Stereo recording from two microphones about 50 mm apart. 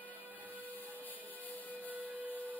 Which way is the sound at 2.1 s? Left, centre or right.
Right.